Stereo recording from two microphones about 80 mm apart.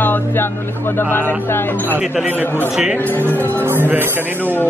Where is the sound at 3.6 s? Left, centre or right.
Right.